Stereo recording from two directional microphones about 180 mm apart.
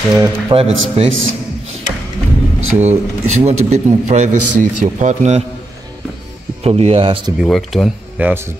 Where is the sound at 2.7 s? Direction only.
40° right (ahead or behind).